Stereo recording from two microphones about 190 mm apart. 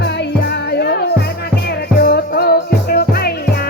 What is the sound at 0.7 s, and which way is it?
Music, 60° left (ahead or behind).